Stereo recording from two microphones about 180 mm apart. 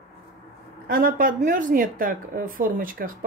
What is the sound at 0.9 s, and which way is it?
Speech, 50° right (ahead or behind).